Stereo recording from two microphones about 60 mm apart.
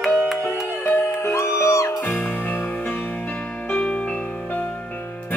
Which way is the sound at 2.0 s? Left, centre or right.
Left.